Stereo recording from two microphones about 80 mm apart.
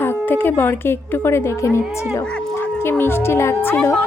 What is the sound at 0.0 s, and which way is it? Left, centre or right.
Speech, left.